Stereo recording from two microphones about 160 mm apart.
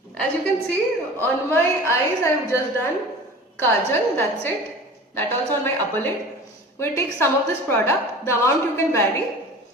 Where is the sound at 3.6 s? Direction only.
15° left (ahead or behind).